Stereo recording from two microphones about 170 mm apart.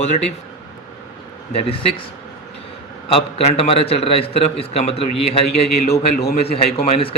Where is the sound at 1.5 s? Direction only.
35° left (ahead or behind).